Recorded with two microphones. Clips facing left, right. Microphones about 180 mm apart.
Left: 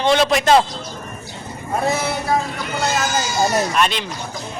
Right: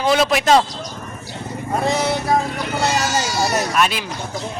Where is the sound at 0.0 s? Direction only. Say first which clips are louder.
Left 1 dB; centre (ahead or behind).